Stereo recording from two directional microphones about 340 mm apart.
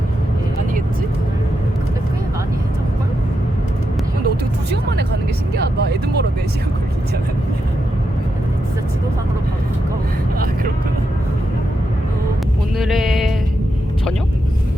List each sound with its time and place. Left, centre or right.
4.7 s music: right
5.5 s vehicle: right
12.7 s a sound: centre